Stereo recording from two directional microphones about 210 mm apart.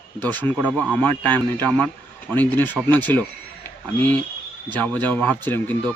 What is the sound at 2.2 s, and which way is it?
Speech, 10° left (ahead or behind).